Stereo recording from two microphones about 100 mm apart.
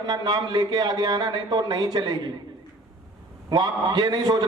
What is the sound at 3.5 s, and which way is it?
Speech, 45° right (ahead or behind).